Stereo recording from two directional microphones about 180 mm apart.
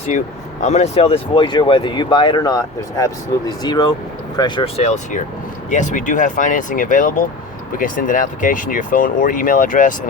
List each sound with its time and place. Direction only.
0.6 s speech: 35° left (ahead or behind)
3.6 s speech: 20° left (ahead or behind); by 9.9 s 45° left (ahead or behind)